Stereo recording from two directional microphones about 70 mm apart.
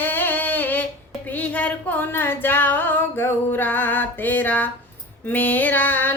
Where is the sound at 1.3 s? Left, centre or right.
Left.